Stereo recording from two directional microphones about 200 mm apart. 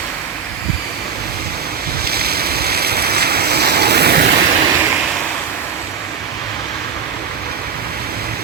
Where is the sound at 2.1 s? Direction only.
50° right (ahead or behind).